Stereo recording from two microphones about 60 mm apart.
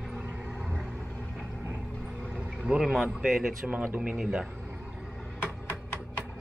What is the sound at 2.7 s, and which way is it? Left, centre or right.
Speech, centre.